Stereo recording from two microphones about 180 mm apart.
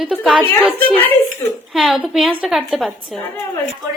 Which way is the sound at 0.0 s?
5° right (ahead or behind).